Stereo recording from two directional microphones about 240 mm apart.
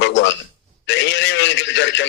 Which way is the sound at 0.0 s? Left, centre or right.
Left.